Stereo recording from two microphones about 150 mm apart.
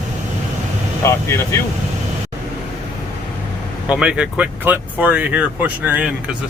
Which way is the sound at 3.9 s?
5° right (ahead or behind).